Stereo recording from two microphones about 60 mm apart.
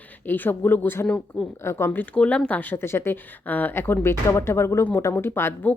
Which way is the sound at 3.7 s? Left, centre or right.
Left.